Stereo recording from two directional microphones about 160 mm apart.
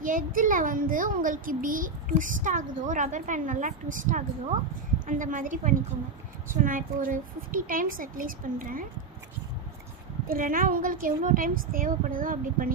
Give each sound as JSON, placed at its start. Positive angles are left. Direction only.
{"t": 0.0, "sound": "a child's voice", "side_deg": -55}
{"t": 10.2, "sound": "a child's voice", "side_deg": -60}